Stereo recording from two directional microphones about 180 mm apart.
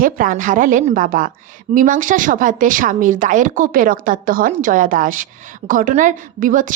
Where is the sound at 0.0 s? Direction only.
50° right (ahead or behind).